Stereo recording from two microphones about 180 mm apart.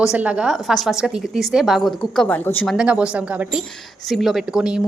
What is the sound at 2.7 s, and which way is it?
A woman's voice, 5° right (ahead or behind).